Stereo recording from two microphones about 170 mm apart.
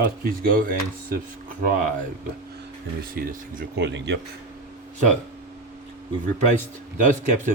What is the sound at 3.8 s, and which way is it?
Speech, 90° right.